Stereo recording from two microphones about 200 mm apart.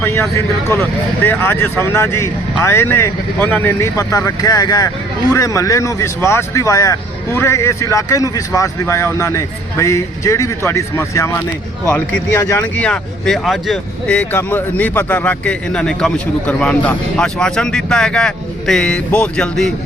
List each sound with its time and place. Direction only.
0.0 s speech: 10° left (ahead or behind)